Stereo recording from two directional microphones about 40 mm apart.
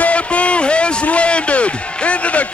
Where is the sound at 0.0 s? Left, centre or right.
Left.